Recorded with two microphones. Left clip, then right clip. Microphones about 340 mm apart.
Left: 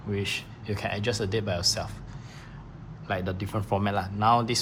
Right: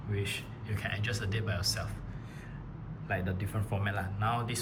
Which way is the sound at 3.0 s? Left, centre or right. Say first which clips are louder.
Left 5 dB; centre.